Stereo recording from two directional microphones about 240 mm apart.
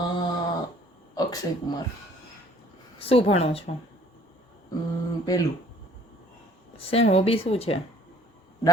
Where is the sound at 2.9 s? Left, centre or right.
Left.